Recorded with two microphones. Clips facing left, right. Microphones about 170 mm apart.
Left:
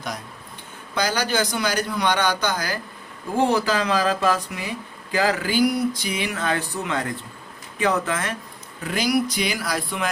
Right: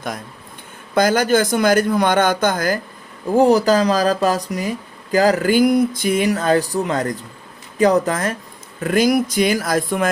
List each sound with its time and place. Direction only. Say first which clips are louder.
0.9 s a man's voice: right 8 dB; 50° right (ahead or behind)